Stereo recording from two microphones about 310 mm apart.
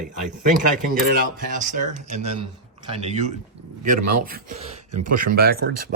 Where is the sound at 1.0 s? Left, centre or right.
Right.